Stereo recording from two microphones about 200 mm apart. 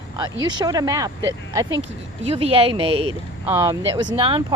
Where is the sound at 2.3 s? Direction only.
30° right (ahead or behind).